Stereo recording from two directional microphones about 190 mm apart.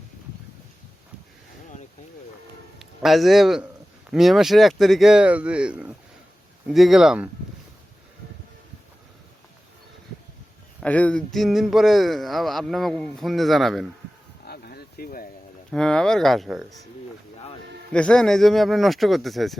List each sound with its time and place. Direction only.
2.7 s a man's voice: centre (ahead or behind)
10.8 s speech: 5° left (ahead or behind)
14.4 s a sound: 55° left (ahead or behind)
15.7 s speech: 5° left (ahead or behind)
17.9 s speech: 5° left (ahead or behind)